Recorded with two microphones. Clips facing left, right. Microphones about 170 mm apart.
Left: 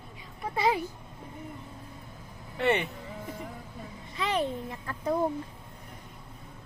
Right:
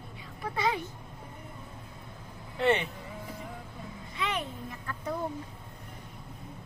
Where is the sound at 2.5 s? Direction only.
Centre (ahead or behind).